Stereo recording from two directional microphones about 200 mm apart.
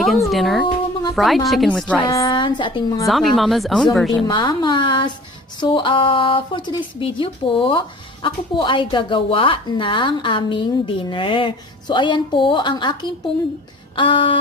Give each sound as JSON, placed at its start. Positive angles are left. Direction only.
{"t": 0.0, "sound": "a woman's voice", "side_deg": 0}
{"t": 2.0, "sound": "speech", "side_deg": 20}
{"t": 3.1, "sound": "a woman's voice", "side_deg": 0}
{"t": 4.3, "sound": "speech", "side_deg": 20}
{"t": 13.9, "sound": "speech", "side_deg": 25}